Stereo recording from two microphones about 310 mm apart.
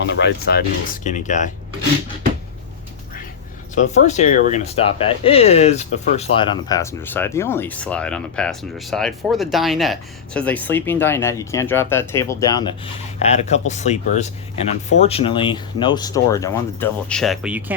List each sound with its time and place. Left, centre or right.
0.2 s speech: left
3.8 s speech: left; by 17.7 s centre